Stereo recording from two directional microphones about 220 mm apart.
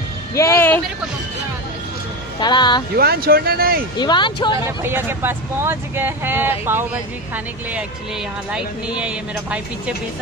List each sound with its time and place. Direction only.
0.3 s speech: 15° left (ahead or behind)
2.4 s speech: 20° left (ahead or behind)
3.0 s speech: 45° right (ahead or behind)
4.0 s speech: 20° left (ahead or behind)
4.6 s speech: 10° right (ahead or behind)
8.5 s speech: 5° right (ahead or behind)